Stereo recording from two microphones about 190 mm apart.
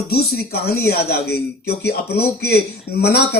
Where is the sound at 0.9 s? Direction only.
55° left (ahead or behind).